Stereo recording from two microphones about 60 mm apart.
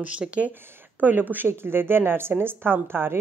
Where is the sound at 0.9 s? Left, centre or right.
Right.